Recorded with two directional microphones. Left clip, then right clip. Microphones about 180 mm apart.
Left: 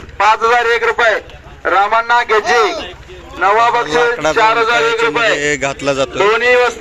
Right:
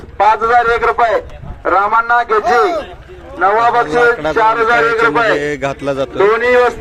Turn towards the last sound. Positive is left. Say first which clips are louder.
# right 1 dB
turn(degrees=-70)  # may be behind; listen again after turning